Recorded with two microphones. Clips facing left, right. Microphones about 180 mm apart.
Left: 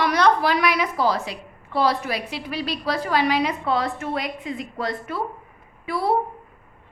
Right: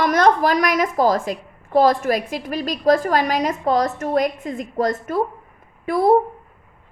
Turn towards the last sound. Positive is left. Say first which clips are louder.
# right 7 dB
turn(degrees=-50)  # may be behind; listen again after turning